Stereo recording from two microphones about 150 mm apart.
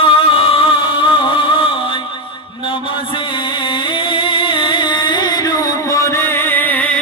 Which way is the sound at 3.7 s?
35° left (ahead or behind).